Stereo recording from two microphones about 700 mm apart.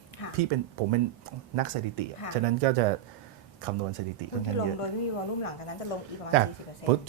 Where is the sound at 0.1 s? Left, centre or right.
Left.